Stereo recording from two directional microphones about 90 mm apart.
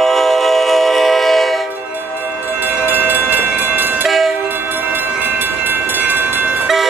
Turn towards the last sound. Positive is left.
turn(degrees=-20)  # may be behind; listen again after turning